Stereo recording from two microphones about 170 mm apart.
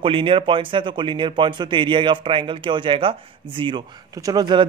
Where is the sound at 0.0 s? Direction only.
30° right (ahead or behind).